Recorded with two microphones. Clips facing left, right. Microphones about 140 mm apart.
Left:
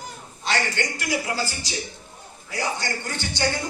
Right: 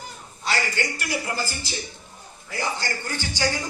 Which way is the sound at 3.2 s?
10° right (ahead or behind).